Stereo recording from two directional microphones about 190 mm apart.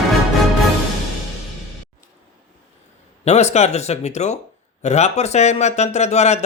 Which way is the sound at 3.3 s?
35° left (ahead or behind).